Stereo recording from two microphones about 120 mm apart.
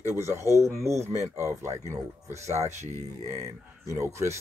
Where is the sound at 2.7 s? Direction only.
75° right (ahead or behind).